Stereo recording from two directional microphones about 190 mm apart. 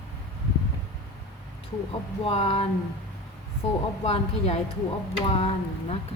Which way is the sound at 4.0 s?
30° left (ahead or behind).